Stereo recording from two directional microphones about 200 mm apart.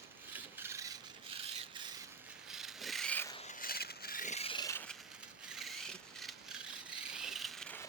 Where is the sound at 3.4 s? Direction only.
45° left (ahead or behind); by 5.0 s 10° left (ahead or behind).